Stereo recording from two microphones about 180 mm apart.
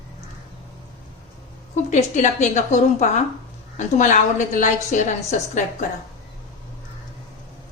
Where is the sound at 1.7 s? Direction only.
40° left (ahead or behind).